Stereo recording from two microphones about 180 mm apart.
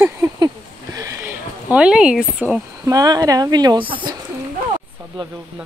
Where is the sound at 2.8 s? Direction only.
20° right (ahead or behind).